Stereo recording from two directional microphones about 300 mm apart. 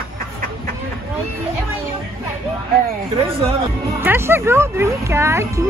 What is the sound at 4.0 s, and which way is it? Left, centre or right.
Speech, centre.